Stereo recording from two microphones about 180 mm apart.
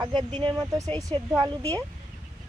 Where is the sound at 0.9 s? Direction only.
20° right (ahead or behind).